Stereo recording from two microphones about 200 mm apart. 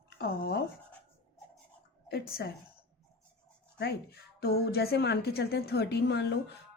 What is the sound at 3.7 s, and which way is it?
A woman's voice, 55° left (ahead or behind).